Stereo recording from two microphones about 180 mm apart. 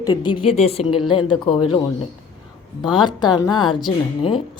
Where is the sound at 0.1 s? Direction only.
25° left (ahead or behind).